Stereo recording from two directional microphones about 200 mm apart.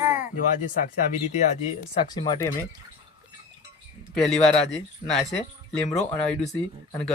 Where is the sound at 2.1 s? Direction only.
20° left (ahead or behind).